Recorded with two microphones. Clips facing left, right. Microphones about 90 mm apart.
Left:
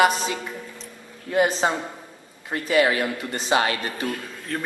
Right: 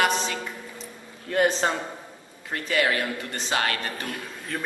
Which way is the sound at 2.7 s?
15° left (ahead or behind).